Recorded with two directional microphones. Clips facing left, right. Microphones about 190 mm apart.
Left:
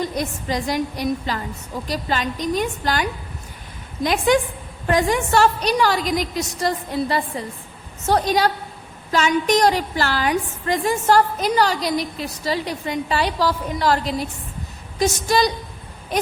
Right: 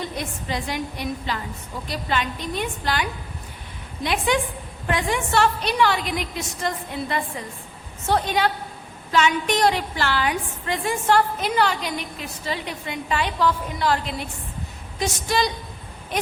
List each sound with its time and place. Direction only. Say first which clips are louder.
0.1 s a woman's voice: left 4 dB; 40° left (ahead or behind)